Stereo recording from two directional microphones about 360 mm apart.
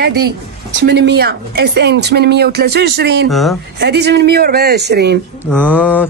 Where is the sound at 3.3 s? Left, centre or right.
Centre.